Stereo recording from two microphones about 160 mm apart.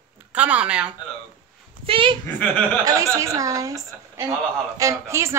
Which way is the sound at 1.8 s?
35° right (ahead or behind).